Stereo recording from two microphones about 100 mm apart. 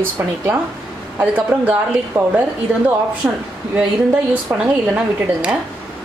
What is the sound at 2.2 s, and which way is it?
Speech, 30° right (ahead or behind).